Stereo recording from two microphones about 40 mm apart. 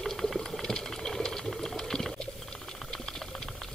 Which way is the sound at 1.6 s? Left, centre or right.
Centre.